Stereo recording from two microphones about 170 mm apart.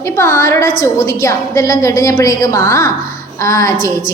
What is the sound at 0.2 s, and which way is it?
A woman's voice, 15° left (ahead or behind).